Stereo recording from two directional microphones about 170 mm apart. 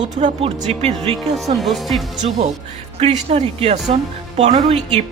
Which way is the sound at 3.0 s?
40° right (ahead or behind).